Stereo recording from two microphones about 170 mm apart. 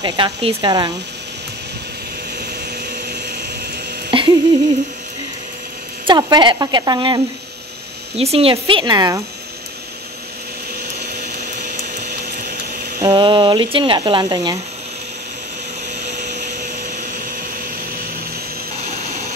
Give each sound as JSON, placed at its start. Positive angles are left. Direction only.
{"t": 0.0, "sound": "speech", "side_deg": -30}
{"t": 4.1, "sound": "a sound", "side_deg": -30}
{"t": 6.0, "sound": "speech", "side_deg": -25}
{"t": 8.2, "sound": "speech", "side_deg": -35}
{"t": 12.1, "sound": "a sound", "side_deg": -80}
{"t": 13.0, "sound": "speech", "side_deg": -25}